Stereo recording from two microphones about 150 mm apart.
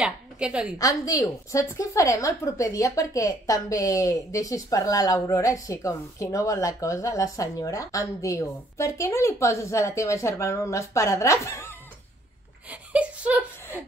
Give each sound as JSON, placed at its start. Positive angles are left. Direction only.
{"t": 0.0, "sound": "a woman's voice", "side_deg": -5}
{"t": 0.7, "sound": "a woman's voice", "side_deg": 25}
{"t": 12.9, "sound": "a sound", "side_deg": -10}